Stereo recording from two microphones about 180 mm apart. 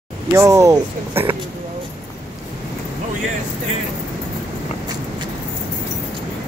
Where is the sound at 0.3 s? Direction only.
15° right (ahead or behind).